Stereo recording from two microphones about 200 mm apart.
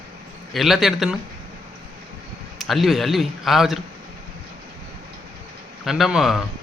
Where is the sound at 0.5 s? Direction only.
Centre (ahead or behind).